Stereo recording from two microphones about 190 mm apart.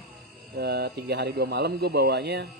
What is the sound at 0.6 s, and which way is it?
A man's voice, 60° right (ahead or behind).